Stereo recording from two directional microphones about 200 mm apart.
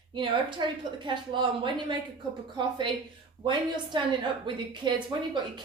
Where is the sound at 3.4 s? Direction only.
25° right (ahead or behind).